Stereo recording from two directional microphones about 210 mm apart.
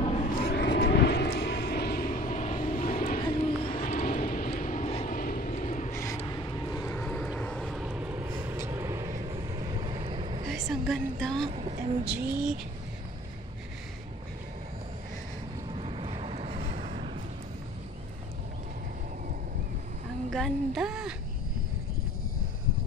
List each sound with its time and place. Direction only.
0.0 s vehicle: 30° left (ahead or behind)
0.4 s vehicle: 50° left (ahead or behind)
2.2 s vehicle: 30° left (ahead or behind)
3.2 s music: 25° left (ahead or behind)
3.8 s vehicle: 40° left (ahead or behind)
5.9 s vehicle: 15° left (ahead or behind); by 10.5 s 25° right (ahead or behind)
10.5 s a sound: centre (ahead or behind)
11.5 s vehicle: 30° right (ahead or behind)
15.7 s vehicle: 25° right (ahead or behind)
20.2 s a sound: centre (ahead or behind)